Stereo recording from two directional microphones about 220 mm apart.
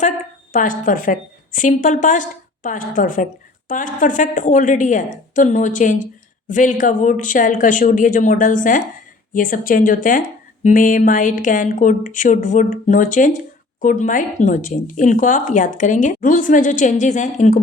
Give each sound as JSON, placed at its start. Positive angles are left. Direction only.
{"t": 0.5, "sound": "speech", "side_deg": 35}